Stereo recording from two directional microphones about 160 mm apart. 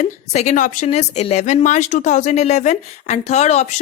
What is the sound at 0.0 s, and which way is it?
Speech, 50° left (ahead or behind).